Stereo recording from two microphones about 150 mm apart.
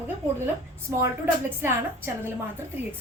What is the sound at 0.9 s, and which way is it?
A woman's voice, 15° right (ahead or behind).